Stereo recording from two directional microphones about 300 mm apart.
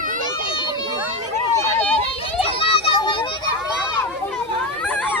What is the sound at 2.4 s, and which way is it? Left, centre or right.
Children playing, centre.